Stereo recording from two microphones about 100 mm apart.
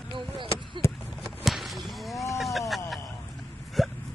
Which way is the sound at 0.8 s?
25° left (ahead or behind).